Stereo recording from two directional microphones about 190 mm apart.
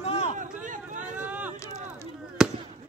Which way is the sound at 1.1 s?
10° right (ahead or behind).